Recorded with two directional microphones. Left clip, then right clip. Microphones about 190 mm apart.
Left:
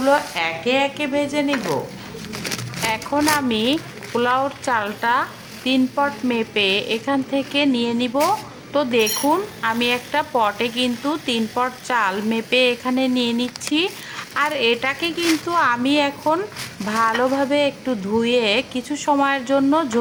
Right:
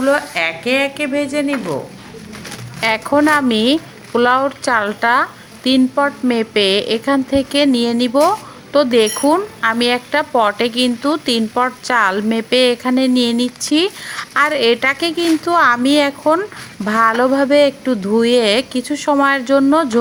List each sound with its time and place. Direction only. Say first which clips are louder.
0.0 s speech: right 3 dB; 15° right (ahead or behind)
2.8 s speech: right 7 dB; 35° right (ahead or behind)